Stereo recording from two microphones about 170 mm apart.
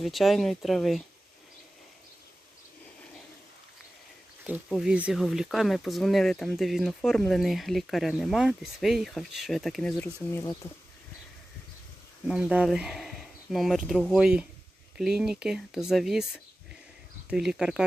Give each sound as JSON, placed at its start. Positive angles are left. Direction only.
{"t": 0.0, "sound": "speech", "side_deg": 0}
{"t": 4.7, "sound": "speech", "side_deg": -5}
{"t": 10.3, "sound": "speech", "side_deg": 25}
{"t": 12.3, "sound": "speech", "side_deg": -5}